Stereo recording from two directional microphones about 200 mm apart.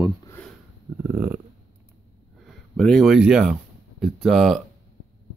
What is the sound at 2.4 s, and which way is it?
Speech, 5° left (ahead or behind).